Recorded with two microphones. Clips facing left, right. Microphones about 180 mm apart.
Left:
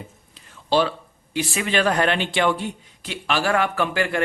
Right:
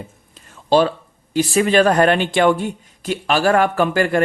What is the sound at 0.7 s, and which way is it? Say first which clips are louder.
Speech: right 5 dB; 45° right (ahead or behind).